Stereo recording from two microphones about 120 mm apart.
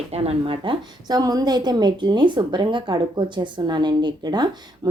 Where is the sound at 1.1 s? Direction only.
30° right (ahead or behind).